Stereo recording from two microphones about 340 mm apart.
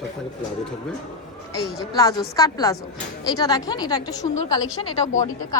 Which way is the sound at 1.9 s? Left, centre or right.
Centre.